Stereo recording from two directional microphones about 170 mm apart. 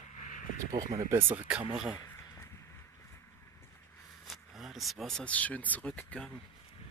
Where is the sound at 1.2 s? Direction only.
10° right (ahead or behind).